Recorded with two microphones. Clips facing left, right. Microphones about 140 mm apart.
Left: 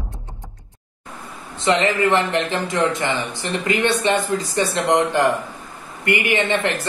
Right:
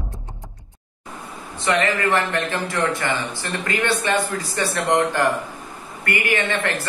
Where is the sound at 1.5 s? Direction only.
20° left (ahead or behind).